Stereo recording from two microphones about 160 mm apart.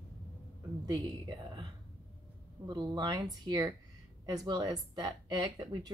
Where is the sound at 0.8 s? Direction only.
25° right (ahead or behind).